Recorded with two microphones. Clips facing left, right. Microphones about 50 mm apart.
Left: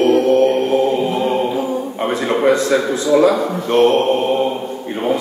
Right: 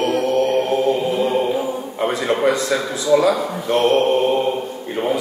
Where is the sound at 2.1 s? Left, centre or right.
Left.